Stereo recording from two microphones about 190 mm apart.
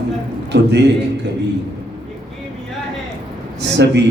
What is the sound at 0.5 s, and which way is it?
Speech, 65° right (ahead or behind).